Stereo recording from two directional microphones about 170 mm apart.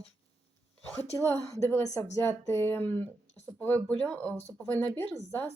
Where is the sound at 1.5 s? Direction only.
15° left (ahead or behind).